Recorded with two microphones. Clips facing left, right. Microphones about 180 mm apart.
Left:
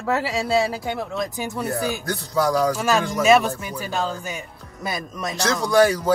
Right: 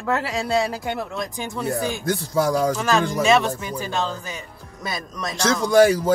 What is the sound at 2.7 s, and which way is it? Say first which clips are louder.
Speech: even; 10° left (ahead or behind).